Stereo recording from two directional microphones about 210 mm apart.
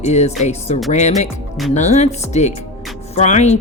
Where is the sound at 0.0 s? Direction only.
30° left (ahead or behind).